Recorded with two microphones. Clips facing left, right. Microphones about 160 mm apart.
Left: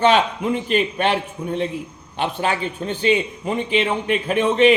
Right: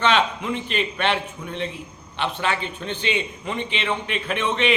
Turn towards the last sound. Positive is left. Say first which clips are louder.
# left 8 dB
turn(degrees=40)  # may be behind; listen again after turning